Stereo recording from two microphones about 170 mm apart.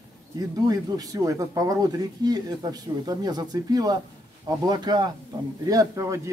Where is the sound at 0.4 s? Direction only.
20° right (ahead or behind).